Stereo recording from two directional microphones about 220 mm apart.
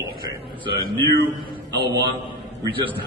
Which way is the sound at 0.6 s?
20° right (ahead or behind).